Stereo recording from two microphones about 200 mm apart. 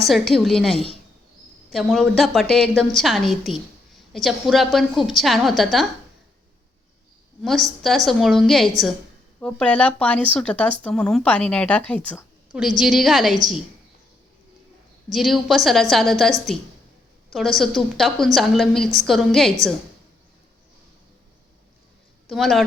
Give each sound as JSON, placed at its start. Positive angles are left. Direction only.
{"t": 0.1, "sound": "speech", "side_deg": 0}
{"t": 7.4, "sound": "speech", "side_deg": 0}
{"t": 15.1, "sound": "speech", "side_deg": 0}
{"t": 17.3, "sound": "speech", "side_deg": 0}
{"t": 22.3, "sound": "speech", "side_deg": 0}